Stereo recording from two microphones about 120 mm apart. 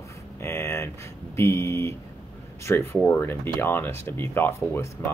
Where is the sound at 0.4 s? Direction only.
20° left (ahead or behind).